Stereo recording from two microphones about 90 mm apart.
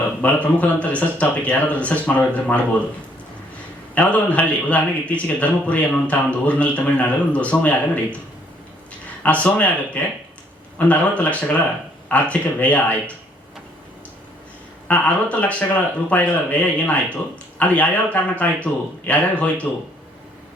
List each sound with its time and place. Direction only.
0.2 s a man's voice: 15° left (ahead or behind)
3.9 s a man's voice: 15° left (ahead or behind)
9.2 s a man's voice: 15° left (ahead or behind)
14.8 s a man's voice: 15° left (ahead or behind)